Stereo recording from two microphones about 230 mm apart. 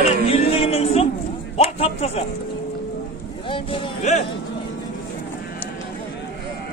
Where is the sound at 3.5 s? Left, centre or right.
Left.